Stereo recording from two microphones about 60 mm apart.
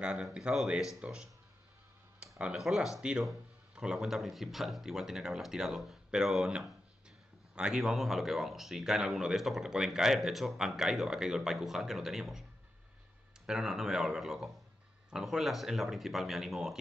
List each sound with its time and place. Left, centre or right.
0.0 s speech: centre
2.3 s speech: centre
2.6 s speech: centre
3.0 s speech: centre
4.0 s speech: centre
7.5 s speech: centre
13.5 s speech: centre